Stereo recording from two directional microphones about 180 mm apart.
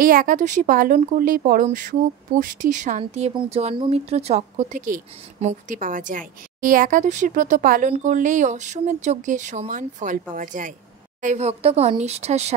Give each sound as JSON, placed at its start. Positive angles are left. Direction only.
{"t": 0.0, "sound": "a woman's voice", "side_deg": -50}